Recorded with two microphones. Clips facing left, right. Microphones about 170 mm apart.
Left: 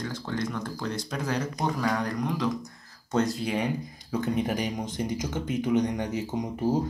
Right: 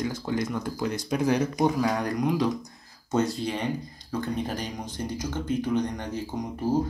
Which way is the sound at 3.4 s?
5° left (ahead or behind).